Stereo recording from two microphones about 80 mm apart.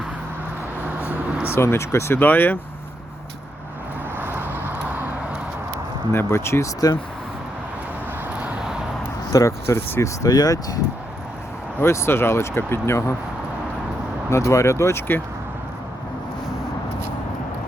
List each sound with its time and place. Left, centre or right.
1.5 s speech: left
4.2 s vehicle: right
6.1 s speech: left
8.4 s vehicle: centre
9.3 s speech: left
10.2 s speech: left
11.8 s speech: left
14.3 s speech: left